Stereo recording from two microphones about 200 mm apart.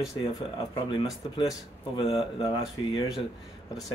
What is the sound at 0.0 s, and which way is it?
Speech, 25° left (ahead or behind).